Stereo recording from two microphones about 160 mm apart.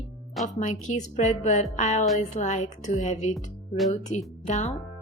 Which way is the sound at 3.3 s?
Centre (ahead or behind).